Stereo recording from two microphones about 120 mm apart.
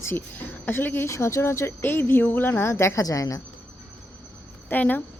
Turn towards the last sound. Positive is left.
turn(degrees=15)  # may be behind; listen again after turning